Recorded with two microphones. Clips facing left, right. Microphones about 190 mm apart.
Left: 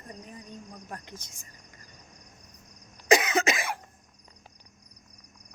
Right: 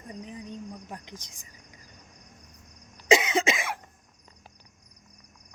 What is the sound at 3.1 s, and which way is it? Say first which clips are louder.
Cough: even; 25° right (ahead or behind).